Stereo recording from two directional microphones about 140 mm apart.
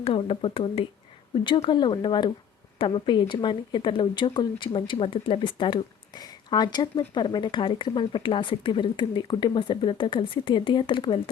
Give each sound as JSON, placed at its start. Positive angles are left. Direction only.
{"t": 0.0, "sound": "speech", "side_deg": 40}